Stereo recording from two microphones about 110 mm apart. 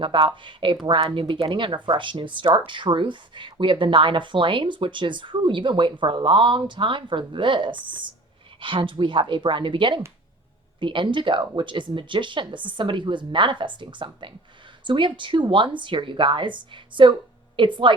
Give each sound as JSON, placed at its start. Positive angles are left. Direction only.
{"t": 0.0, "sound": "speech", "side_deg": -50}